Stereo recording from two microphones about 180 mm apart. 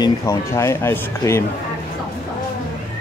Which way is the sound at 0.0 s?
15° left (ahead or behind).